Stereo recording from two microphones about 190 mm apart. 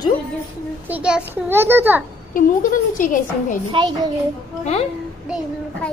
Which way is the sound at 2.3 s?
45° left (ahead or behind).